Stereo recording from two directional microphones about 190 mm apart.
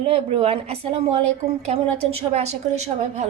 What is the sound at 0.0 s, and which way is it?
A woman's voice, 30° right (ahead or behind).